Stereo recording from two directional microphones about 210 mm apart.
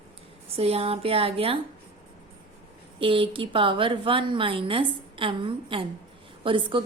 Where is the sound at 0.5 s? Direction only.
30° right (ahead or behind).